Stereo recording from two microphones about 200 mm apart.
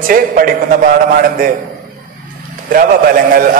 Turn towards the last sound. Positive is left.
turn(degrees=-45)  # may be behind; listen again after turning